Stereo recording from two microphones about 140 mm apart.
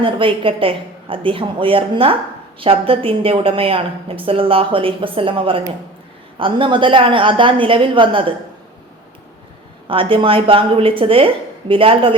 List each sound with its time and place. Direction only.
0.0 s a woman's voice: 40° right (ahead or behind)
9.8 s a woman's voice: 40° right (ahead or behind)